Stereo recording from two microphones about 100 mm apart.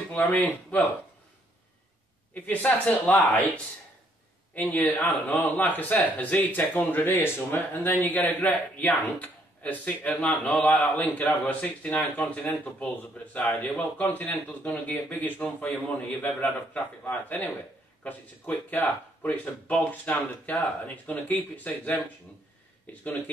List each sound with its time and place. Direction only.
0.4 s speech: 20° left (ahead or behind)
2.3 s speech: 15° left (ahead or behind)